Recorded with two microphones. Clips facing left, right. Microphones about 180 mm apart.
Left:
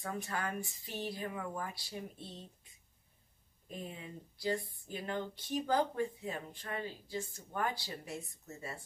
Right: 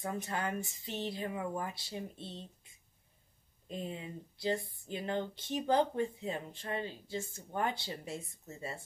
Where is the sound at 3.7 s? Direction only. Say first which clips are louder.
Right 4 dB; 25° right (ahead or behind).